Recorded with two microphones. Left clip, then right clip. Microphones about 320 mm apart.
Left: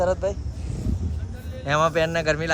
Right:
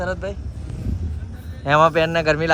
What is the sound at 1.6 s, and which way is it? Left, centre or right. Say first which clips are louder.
Speech: right 5 dB; centre.